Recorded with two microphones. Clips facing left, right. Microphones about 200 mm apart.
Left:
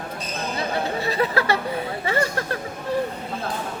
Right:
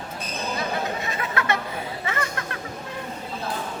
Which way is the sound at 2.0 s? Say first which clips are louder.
Left 7 dB; 35° left (ahead or behind).